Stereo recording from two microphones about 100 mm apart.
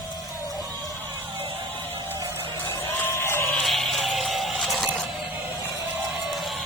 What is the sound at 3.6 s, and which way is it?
Music, centre (ahead or behind).